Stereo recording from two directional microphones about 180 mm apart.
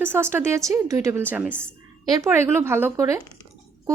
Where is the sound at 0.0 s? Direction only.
15° right (ahead or behind).